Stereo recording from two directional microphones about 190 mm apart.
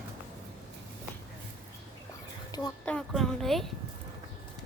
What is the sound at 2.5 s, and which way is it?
Speech, 20° left (ahead or behind).